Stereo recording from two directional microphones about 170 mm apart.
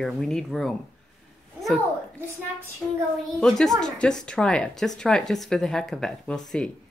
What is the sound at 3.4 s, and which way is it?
Speech, 5° left (ahead or behind).